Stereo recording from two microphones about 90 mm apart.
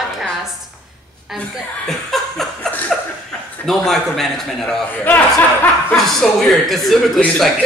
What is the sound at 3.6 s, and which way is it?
Speech, 5° left (ahead or behind).